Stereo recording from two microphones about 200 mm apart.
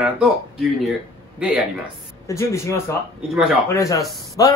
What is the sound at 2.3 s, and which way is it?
Speech, 15° left (ahead or behind).